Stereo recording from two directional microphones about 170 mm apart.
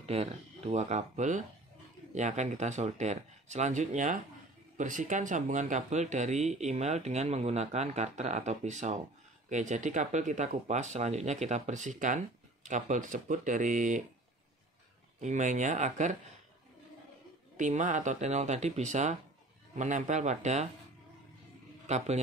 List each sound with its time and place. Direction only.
0.0 s speech: 35° right (ahead or behind)
15.1 s speech: 45° right (ahead or behind)
17.6 s speech: 45° right (ahead or behind)
21.8 s speech: 40° right (ahead or behind)